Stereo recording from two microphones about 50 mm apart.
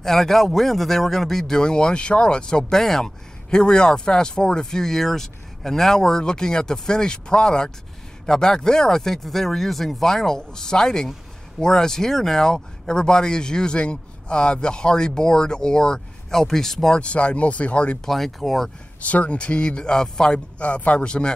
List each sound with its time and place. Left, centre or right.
0.0 s speech: centre
1.4 s speech: centre
17.0 s speech: left
18.0 s speech: centre
19.0 s speech: left